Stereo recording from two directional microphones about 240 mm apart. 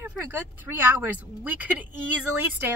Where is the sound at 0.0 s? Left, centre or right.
Centre.